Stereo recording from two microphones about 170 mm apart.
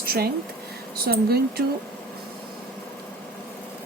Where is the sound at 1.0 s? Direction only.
65° right (ahead or behind).